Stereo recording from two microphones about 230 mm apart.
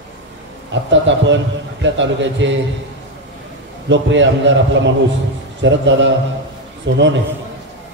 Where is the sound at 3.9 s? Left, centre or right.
Right.